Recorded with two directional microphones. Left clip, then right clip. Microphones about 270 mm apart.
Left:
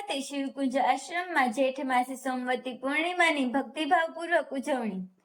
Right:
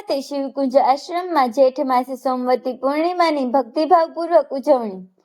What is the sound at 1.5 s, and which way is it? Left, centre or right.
Speech, right.